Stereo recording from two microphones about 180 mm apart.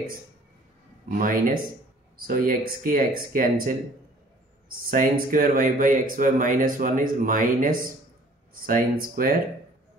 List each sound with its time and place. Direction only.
1.1 s speech: 50° right (ahead or behind)
4.9 s speech: 50° right (ahead or behind)